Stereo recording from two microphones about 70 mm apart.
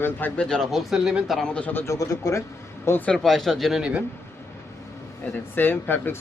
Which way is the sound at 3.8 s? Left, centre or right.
Centre.